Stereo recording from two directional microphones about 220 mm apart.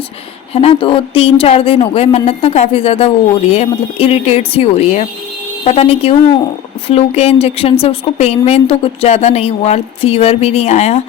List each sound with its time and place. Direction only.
0.5 s a woman's voice: 25° left (ahead or behind)